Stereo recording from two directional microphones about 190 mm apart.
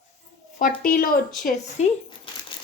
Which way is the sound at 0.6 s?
50° left (ahead or behind).